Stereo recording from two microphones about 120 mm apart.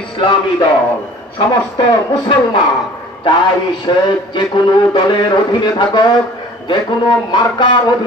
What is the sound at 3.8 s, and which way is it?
Music, 35° left (ahead or behind).